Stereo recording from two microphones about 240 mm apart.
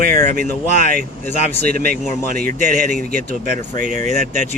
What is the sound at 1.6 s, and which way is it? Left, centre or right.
Speech, right.